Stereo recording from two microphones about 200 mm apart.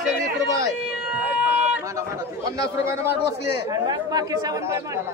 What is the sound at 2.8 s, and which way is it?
Speech, 15° right (ahead or behind).